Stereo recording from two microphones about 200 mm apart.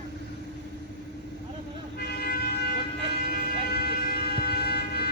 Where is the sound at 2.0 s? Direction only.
50° left (ahead or behind).